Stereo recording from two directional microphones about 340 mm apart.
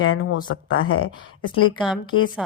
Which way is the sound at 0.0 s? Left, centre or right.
Left.